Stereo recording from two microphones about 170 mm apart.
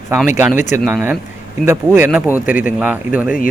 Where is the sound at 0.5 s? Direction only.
45° left (ahead or behind).